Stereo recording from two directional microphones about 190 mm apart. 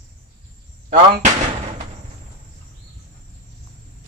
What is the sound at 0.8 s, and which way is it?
Speech, 40° right (ahead or behind).